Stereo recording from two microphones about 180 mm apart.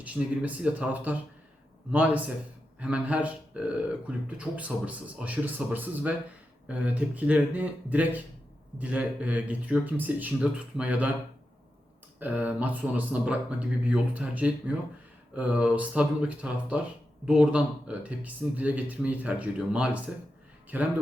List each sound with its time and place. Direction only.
0.0 s speech: 10° right (ahead or behind)
12.2 s speech: 10° right (ahead or behind)